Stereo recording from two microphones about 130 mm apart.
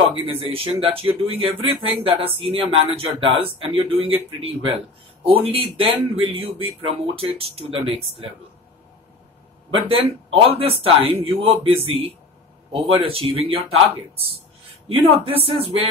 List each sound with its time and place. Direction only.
0.1 s speech: 50° right (ahead or behind)
9.7 s speech: 45° right (ahead or behind)